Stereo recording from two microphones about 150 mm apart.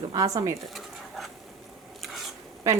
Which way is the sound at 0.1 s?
25° right (ahead or behind).